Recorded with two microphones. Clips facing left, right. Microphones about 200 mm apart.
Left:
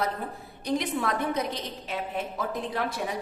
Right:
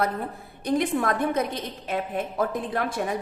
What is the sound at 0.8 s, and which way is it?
Speech, 50° right (ahead or behind).